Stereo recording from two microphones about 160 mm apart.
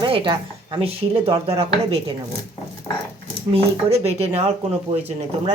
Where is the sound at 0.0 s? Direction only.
30° right (ahead or behind).